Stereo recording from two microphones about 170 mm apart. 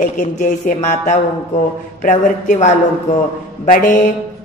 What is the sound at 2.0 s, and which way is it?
Speech, 50° left (ahead or behind).